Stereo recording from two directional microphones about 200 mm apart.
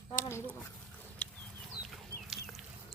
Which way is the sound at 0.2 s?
15° left (ahead or behind).